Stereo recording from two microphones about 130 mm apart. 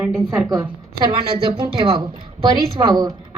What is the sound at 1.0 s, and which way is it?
Speech, 45° right (ahead or behind).